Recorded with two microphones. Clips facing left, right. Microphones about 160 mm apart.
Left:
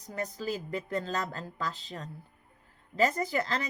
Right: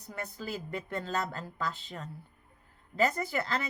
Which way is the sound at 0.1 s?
40° left (ahead or behind).